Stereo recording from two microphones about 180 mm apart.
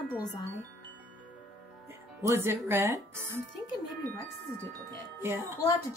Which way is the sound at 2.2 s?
15° right (ahead or behind).